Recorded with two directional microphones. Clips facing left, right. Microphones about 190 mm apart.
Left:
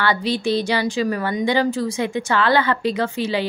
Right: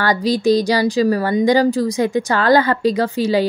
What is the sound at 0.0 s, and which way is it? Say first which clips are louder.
Speech: right 4 dB; 40° right (ahead or behind).